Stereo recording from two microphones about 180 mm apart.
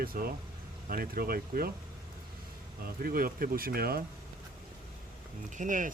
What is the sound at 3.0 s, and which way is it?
Speech, 50° right (ahead or behind).